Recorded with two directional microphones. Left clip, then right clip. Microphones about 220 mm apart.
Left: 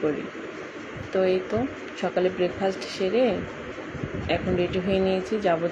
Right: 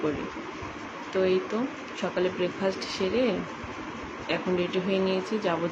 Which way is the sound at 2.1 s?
5° left (ahead or behind).